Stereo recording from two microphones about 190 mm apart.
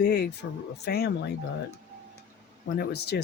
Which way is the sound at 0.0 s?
60° left (ahead or behind).